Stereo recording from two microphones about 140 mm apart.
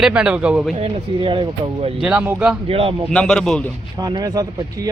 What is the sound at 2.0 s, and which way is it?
Speech, 5° right (ahead or behind).